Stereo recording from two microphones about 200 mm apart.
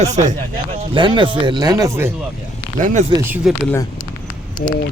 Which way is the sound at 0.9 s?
25° right (ahead or behind).